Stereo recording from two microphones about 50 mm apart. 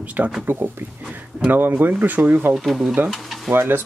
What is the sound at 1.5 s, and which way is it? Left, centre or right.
Speech, right.